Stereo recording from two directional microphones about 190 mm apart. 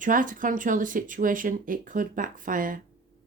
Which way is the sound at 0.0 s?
45° right (ahead or behind).